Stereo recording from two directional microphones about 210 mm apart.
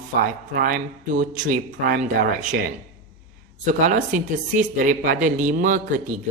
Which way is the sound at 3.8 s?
35° right (ahead or behind).